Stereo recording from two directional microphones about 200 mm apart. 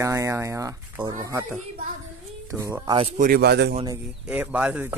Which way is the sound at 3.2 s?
50° right (ahead or behind).